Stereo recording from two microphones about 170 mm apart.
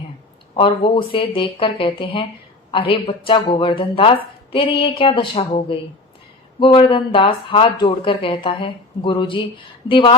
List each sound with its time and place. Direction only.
0.5 s speech: 30° left (ahead or behind)